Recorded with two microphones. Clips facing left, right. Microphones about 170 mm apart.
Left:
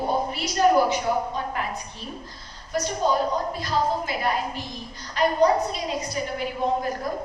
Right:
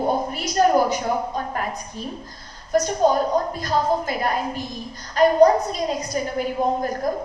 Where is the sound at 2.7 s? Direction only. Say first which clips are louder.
Right 7 dB; 45° right (ahead or behind).